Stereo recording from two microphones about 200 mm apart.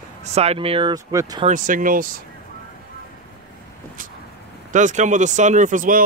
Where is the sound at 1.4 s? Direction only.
40° right (ahead or behind).